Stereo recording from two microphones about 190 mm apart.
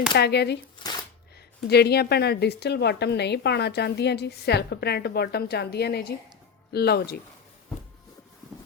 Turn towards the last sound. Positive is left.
turn(degrees=55)  # may be behind; listen again after turning